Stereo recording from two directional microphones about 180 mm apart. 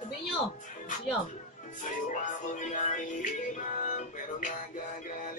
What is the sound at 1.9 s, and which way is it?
Music, 45° left (ahead or behind).